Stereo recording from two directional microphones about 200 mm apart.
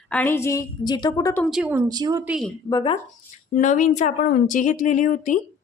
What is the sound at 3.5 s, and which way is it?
Speech, 40° left (ahead or behind).